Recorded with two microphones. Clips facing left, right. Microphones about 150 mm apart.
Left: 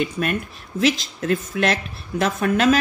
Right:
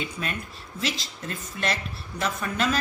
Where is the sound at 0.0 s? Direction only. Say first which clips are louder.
Left 9 dB; 60° left (ahead or behind).